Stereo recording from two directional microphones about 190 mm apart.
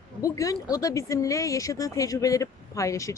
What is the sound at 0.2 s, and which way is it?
Speech, 15° left (ahead or behind).